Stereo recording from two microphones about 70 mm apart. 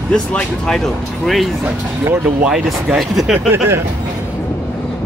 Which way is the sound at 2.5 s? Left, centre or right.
Centre.